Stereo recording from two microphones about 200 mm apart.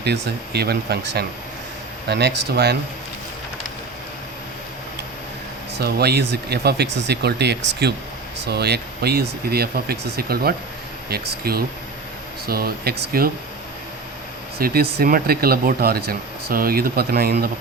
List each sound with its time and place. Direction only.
0.0 s speech: 55° right (ahead or behind)
5.8 s speech: 55° right (ahead or behind)
14.6 s speech: 50° right (ahead or behind)